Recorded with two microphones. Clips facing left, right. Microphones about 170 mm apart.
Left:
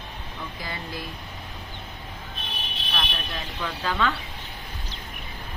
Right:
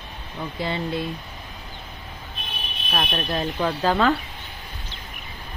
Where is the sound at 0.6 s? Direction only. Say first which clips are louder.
Right 11 dB; 25° right (ahead or behind).